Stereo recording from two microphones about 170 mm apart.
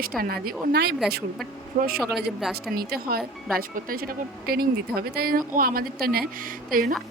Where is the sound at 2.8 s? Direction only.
60° right (ahead or behind).